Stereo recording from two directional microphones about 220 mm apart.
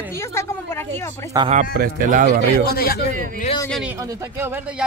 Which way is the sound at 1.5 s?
40° right (ahead or behind).